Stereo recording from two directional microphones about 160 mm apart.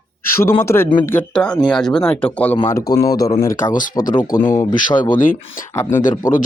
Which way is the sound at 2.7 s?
25° left (ahead or behind).